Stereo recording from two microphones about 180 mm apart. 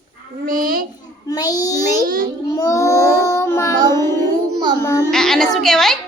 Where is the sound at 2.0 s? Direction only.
55° right (ahead or behind).